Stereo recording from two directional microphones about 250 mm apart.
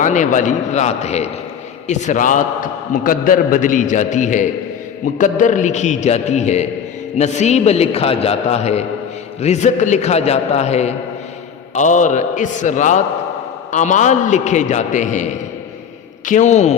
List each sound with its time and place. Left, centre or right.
0.0 s a man's voice: left